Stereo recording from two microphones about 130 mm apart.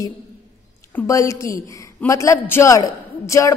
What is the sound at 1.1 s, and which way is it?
A woman's voice, 25° left (ahead or behind).